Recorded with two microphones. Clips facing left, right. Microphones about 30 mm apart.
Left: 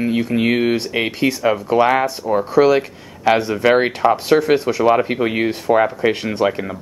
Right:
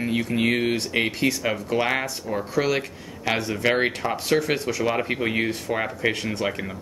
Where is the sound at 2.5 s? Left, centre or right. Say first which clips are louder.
Left 10 dB; centre.